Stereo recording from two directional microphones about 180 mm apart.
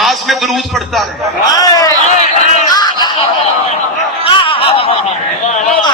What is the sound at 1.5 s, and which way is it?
Speech, 20° left (ahead or behind).